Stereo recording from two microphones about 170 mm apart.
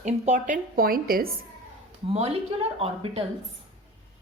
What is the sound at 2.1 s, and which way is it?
Speech, 35° right (ahead or behind).